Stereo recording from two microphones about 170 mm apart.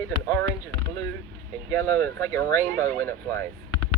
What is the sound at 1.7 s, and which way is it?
Speech, 10° left (ahead or behind).